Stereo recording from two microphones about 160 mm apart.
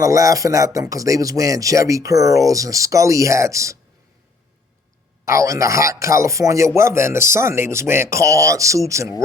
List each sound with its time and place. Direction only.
0.0 s speech: 20° right (ahead or behind)
5.2 s speech: 20° right (ahead or behind)